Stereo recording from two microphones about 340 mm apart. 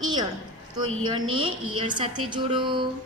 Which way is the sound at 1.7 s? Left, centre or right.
Centre.